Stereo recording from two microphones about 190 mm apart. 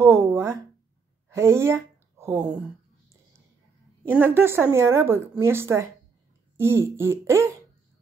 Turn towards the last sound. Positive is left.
turn(degrees=-15)  # may be behind; listen again after turning